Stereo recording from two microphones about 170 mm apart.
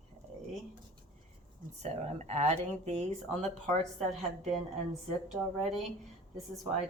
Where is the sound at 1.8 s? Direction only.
40° right (ahead or behind).